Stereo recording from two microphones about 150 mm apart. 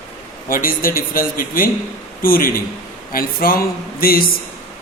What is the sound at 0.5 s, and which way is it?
A man's voice, 70° left (ahead or behind).